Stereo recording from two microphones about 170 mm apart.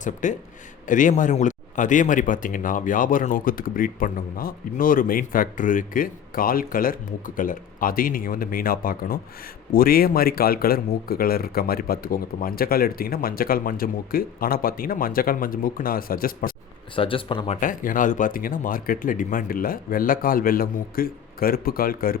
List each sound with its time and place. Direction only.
0.0 s a man's voice: 45° left (ahead or behind)
16.9 s speech: 30° left (ahead or behind)
17.6 s speech: 50° left (ahead or behind)